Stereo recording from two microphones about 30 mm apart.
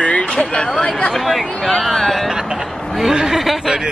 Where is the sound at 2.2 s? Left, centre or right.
Centre.